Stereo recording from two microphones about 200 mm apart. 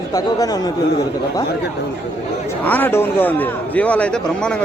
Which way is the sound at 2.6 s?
10° left (ahead or behind).